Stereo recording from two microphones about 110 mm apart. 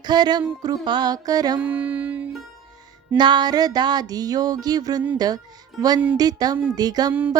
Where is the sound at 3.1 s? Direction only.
40° right (ahead or behind).